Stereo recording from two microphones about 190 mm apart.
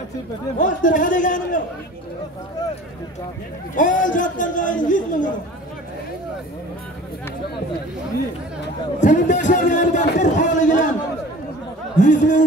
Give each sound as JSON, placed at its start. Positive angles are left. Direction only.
{"t": 0.6, "sound": "a man's voice", "side_deg": 45}
{"t": 3.7, "sound": "a man's voice", "side_deg": 45}
{"t": 9.0, "sound": "a man's voice", "side_deg": 40}
{"t": 12.0, "sound": "a man's voice", "side_deg": 40}